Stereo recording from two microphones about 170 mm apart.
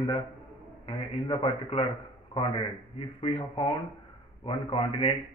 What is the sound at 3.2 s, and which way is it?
A man's voice, 30° left (ahead or behind).